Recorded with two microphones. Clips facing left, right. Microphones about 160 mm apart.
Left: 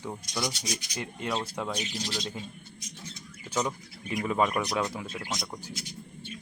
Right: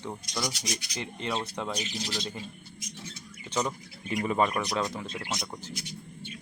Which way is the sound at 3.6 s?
Centre (ahead or behind).